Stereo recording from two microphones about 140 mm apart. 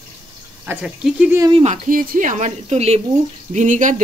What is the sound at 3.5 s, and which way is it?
Speech, 60° right (ahead or behind).